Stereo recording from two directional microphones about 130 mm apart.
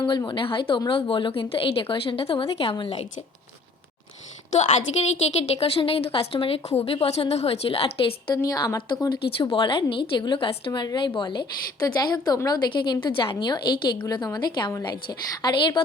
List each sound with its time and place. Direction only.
0.3 s a woman's voice: 40° left (ahead or behind)
4.5 s a woman's voice: 60° left (ahead or behind)
8.4 s a woman's voice: 30° left (ahead or behind)
10.7 s a woman's voice: 30° left (ahead or behind)